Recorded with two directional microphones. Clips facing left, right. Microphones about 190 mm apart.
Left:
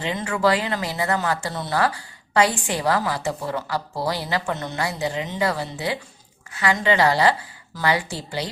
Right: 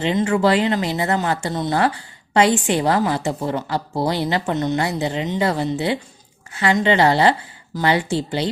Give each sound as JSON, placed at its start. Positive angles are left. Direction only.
{"t": 0.0, "sound": "speech", "side_deg": -25}